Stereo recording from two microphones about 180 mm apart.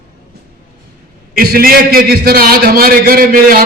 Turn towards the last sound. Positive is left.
turn(degrees=-55)  # may be behind; listen again after turning